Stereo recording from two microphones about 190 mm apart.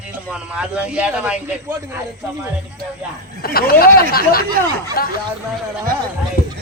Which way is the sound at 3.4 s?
50° left (ahead or behind).